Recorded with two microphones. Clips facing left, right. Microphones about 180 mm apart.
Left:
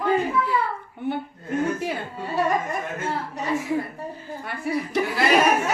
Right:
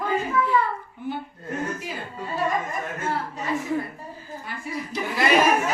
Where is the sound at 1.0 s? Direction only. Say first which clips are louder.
Left 8 dB; 65° left (ahead or behind).